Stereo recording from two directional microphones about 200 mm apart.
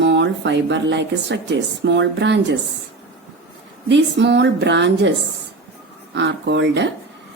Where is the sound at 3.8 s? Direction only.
60° right (ahead or behind).